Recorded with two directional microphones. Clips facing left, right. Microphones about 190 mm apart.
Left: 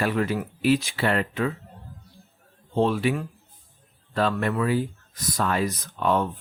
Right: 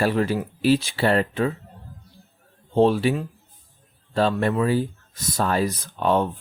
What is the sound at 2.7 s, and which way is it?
Speech, 35° right (ahead or behind).